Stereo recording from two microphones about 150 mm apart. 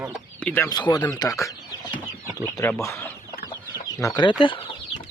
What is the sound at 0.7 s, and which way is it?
Speech, 25° left (ahead or behind).